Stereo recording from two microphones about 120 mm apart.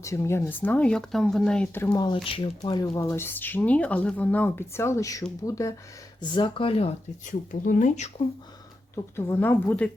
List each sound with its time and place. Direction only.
0.0 s speech: 25° left (ahead or behind); by 1.6 s 5° left (ahead or behind)
1.9 s speech: 35° left (ahead or behind)
2.2 s speech: 45° left (ahead or behind); by 5.7 s 25° left (ahead or behind)
6.2 s speech: 40° left (ahead or behind)
7.3 s speech: 90° left
9.1 s speech: 20° left (ahead or behind)